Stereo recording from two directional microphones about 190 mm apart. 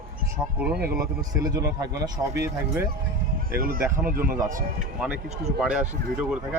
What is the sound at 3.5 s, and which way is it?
Speech, 50° right (ahead or behind).